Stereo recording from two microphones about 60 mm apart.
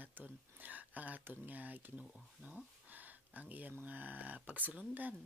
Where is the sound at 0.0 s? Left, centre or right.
Right.